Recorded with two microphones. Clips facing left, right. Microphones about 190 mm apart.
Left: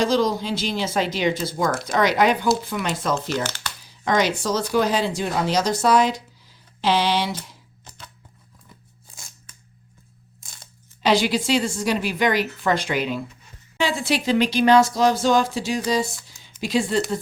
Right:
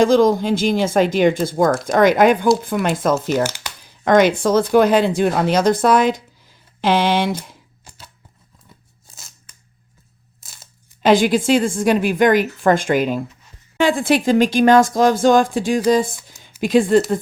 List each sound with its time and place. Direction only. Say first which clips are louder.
0.0 s speech: right 7 dB; 50° right (ahead or behind)
3.4 s speech: right 6 dB; 10° right (ahead or behind)
3.8 s speech: right 8 dB; 55° right (ahead or behind)
7.9 s a sound: even; 5° right (ahead or behind)
10.4 s tearing: even; 5° right (ahead or behind)
11.0 s speech: right 6 dB; 50° right (ahead or behind)
16.2 s a sound: right 4 dB; 50° right (ahead or behind)
16.6 s speech: right 8 dB; 50° right (ahead or behind)